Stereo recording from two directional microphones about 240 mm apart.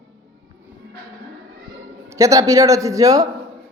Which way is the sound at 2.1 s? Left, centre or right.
Centre.